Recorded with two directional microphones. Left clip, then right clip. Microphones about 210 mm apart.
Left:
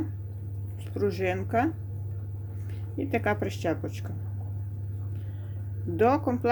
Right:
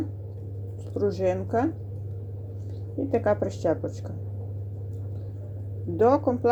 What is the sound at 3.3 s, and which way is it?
Speech, 15° left (ahead or behind).